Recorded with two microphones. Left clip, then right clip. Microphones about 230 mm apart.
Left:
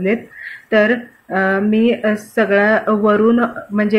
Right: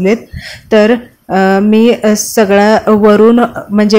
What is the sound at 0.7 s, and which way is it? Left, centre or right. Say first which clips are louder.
A woman's voice: right 6 dB; right.